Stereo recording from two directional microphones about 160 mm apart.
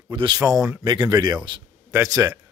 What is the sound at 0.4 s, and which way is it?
A man's voice, 20° right (ahead or behind).